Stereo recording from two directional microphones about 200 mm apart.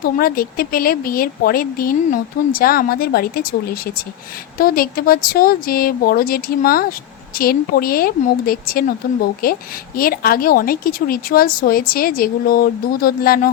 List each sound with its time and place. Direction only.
0.0 s a woman's voice: 45° left (ahead or behind)
4.5 s a woman's voice: 45° left (ahead or behind)